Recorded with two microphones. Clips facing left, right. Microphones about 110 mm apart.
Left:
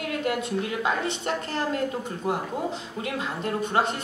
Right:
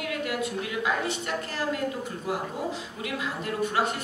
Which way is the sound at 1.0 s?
25° left (ahead or behind).